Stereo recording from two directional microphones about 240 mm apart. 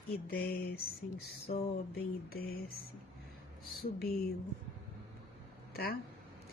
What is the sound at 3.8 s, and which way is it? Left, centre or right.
Speech, left.